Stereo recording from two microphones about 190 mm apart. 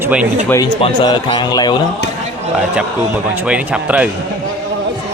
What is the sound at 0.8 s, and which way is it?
Speech, 25° left (ahead or behind).